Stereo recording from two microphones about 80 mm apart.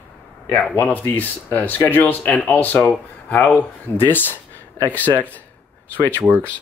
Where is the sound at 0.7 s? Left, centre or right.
Left.